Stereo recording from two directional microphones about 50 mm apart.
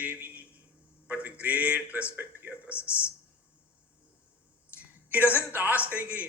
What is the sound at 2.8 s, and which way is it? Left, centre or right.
Speech, left.